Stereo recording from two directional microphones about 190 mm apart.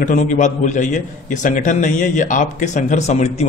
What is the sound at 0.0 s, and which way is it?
A man's voice, 40° left (ahead or behind).